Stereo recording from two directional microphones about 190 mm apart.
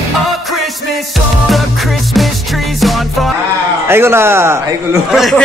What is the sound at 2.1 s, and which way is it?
Music, centre (ahead or behind).